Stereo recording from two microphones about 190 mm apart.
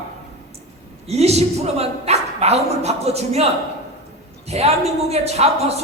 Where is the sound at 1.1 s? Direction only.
35° right (ahead or behind).